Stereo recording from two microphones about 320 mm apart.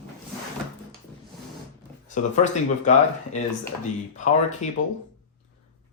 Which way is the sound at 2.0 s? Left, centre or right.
Left.